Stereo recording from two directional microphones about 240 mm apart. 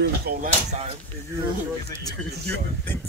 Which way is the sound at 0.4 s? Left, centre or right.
Right.